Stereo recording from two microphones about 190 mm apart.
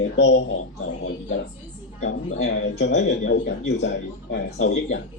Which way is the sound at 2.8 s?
65° left (ahead or behind).